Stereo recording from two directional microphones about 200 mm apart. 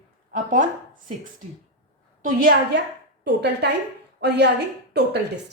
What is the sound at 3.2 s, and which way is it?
A woman's voice, 60° right (ahead or behind).